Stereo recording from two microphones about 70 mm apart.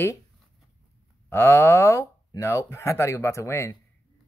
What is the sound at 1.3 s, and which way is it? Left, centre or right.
Speech, left.